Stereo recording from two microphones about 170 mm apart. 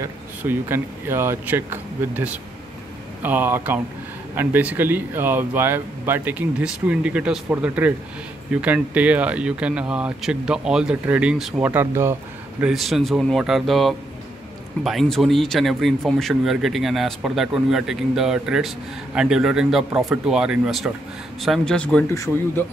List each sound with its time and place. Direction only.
0.0 s speech: 10° right (ahead or behind); by 22.0 s 5° left (ahead or behind)
22.1 s a man's voice: 20° left (ahead or behind)